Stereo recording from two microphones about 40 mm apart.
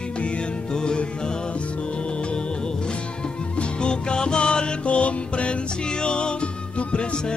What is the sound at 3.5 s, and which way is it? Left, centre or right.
Music, left.